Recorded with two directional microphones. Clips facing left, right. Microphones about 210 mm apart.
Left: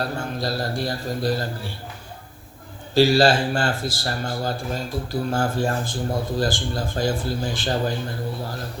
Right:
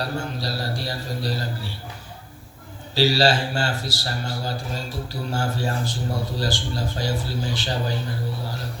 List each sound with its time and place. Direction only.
0.0 s speech: 50° left (ahead or behind)
2.9 s speech: 50° left (ahead or behind)